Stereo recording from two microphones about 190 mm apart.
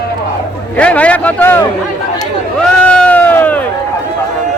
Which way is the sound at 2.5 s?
5° left (ahead or behind).